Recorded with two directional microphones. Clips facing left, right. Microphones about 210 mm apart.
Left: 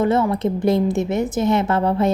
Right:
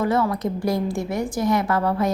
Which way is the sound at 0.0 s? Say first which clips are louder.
Left 3 dB; 25° left (ahead or behind).